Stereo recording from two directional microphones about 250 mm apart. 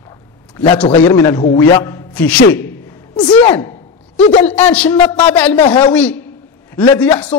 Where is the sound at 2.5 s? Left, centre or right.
Centre.